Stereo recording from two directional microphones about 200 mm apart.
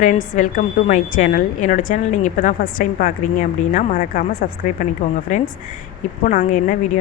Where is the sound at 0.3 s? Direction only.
40° left (ahead or behind).